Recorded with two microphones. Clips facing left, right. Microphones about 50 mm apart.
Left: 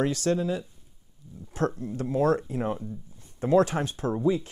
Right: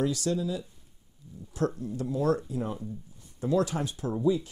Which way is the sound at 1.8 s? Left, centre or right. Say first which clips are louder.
Left 4 dB; left.